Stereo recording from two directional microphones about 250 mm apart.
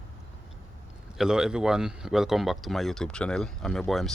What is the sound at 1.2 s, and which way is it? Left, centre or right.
Speech, centre.